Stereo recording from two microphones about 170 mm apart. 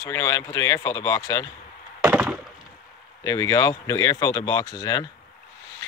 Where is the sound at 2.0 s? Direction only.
10° right (ahead or behind).